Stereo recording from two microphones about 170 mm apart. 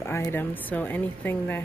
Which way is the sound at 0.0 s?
15° left (ahead or behind).